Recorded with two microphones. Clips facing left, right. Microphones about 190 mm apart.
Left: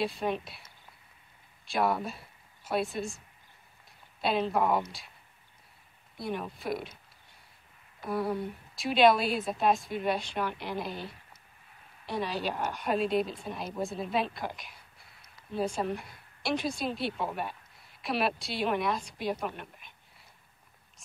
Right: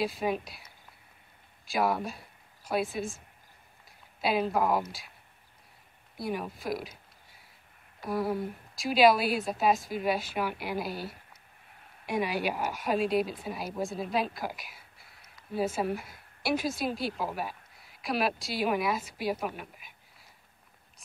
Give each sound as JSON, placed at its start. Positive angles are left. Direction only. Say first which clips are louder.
{"t": 0.0, "sound": "a woman's voice", "louder": "right 1 dB", "side_deg": 0}
{"t": 1.7, "sound": "speech", "louder": "even", "side_deg": 0}
{"t": 4.2, "sound": "a woman's voice", "louder": "even", "side_deg": -5}
{"t": 6.1, "sound": "a woman's voice", "louder": "right 1 dB", "side_deg": -5}
{"t": 8.0, "sound": "a woman's voice", "louder": "right 1 dB", "side_deg": 0}